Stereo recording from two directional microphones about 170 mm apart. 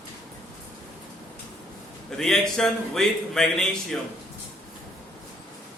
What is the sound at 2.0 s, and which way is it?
A man's voice, 5° left (ahead or behind).